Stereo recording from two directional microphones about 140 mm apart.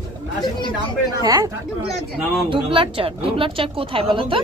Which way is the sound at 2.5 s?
40° right (ahead or behind).